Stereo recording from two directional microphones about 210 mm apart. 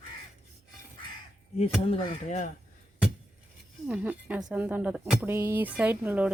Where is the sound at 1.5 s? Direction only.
30° left (ahead or behind).